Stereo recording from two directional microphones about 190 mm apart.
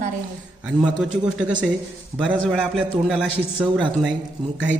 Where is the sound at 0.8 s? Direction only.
5° right (ahead or behind).